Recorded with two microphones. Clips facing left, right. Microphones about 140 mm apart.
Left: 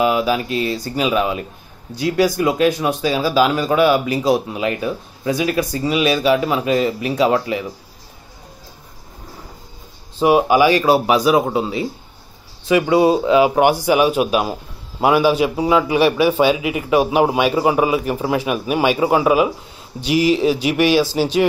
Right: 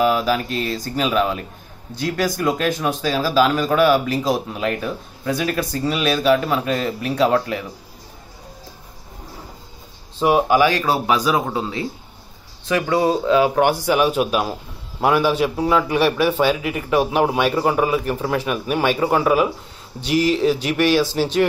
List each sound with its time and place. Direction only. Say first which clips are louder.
0.0 s speech: left 1 dB; 5° left (ahead or behind)
10.1 s speech: left 2 dB; 5° left (ahead or behind)